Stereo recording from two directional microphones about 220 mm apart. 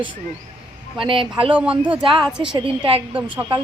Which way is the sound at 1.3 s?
25° right (ahead or behind).